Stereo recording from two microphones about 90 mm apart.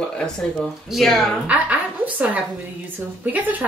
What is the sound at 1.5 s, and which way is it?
Speech, 15° right (ahead or behind).